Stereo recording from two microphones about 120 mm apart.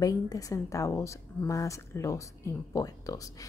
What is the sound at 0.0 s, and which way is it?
A woman's voice, 30° left (ahead or behind).